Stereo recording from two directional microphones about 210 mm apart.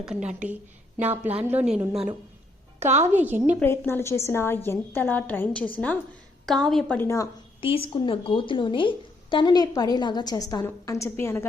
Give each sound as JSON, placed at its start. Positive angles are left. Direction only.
{"t": 0.0, "sound": "a woman's voice", "side_deg": -5}
{"t": 3.0, "sound": "a woman's voice", "side_deg": -10}
{"t": 3.6, "sound": "a woman's voice", "side_deg": 10}
{"t": 7.6, "sound": "a woman's voice", "side_deg": 25}